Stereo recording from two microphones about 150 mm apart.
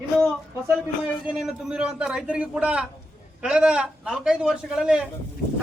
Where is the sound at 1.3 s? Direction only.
5° right (ahead or behind).